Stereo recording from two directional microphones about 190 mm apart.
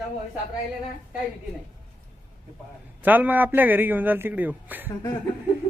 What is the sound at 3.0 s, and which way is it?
A man's voice, 10° right (ahead or behind).